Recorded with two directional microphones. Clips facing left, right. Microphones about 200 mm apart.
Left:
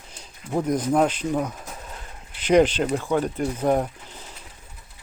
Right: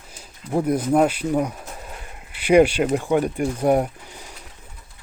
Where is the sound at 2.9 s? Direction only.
15° right (ahead or behind).